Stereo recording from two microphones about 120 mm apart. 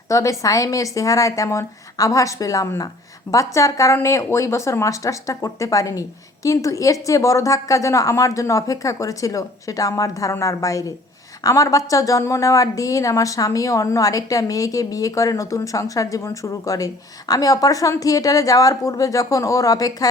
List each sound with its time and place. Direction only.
0.1 s a woman's voice: 25° left (ahead or behind)